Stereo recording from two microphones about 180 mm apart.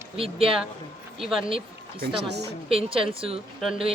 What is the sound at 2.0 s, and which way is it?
Speech, 65° right (ahead or behind).